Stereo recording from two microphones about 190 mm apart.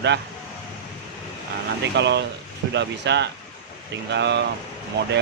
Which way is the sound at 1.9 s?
65° right (ahead or behind).